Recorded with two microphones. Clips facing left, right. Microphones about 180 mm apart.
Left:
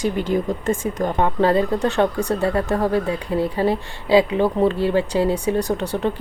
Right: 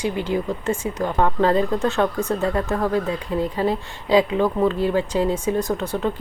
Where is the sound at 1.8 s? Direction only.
35° left (ahead or behind).